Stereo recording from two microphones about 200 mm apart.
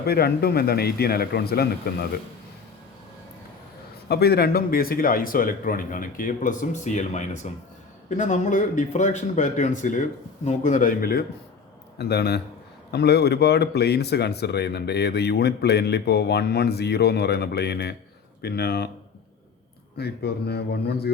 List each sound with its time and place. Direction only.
0.0 s a man's voice: 50° left (ahead or behind)
4.1 s a man's voice: 50° left (ahead or behind)
20.0 s a man's voice: 55° left (ahead or behind)